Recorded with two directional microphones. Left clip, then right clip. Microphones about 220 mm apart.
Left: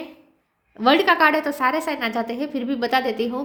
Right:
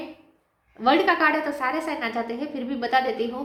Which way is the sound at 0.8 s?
45° left (ahead or behind).